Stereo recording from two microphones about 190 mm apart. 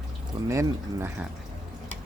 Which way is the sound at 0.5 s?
15° right (ahead or behind).